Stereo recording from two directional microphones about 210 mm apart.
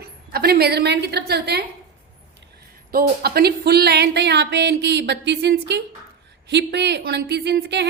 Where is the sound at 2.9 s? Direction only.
45° right (ahead or behind).